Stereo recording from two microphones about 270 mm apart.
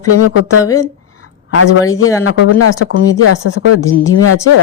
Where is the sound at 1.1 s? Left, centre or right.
Left.